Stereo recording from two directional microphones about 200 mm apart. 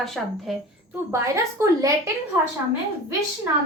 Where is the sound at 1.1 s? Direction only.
15° right (ahead or behind).